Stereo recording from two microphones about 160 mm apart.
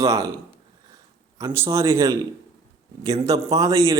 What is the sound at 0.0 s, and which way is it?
Speech, 20° right (ahead or behind).